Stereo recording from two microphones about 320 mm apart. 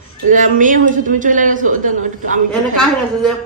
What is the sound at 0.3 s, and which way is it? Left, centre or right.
A man's voice, right.